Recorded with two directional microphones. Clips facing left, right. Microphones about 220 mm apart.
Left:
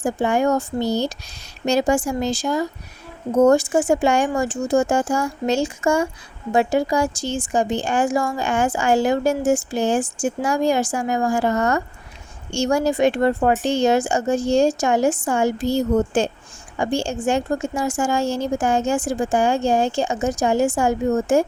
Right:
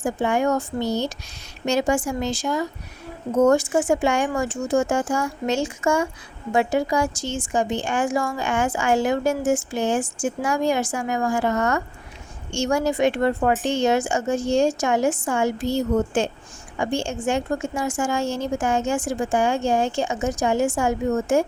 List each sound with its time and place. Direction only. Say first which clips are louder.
0.0 s a woman's voice: left 2 dB; 35° left (ahead or behind)